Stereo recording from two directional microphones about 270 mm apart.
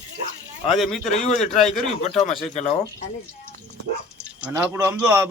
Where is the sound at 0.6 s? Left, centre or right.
Centre.